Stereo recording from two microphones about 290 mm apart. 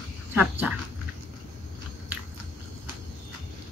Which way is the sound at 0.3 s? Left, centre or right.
Centre.